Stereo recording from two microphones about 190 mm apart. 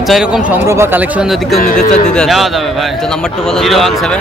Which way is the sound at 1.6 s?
40° left (ahead or behind).